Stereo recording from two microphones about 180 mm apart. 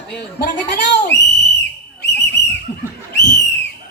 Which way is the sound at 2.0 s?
70° left (ahead or behind).